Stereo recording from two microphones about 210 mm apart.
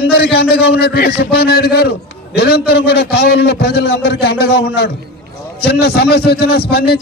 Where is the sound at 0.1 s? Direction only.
50° left (ahead or behind).